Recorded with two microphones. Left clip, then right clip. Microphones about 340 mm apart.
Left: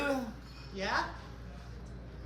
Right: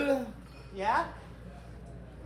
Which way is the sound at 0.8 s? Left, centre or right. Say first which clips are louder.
Right 5 dB; centre.